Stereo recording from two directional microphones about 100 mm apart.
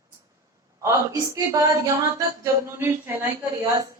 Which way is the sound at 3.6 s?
40° right (ahead or behind).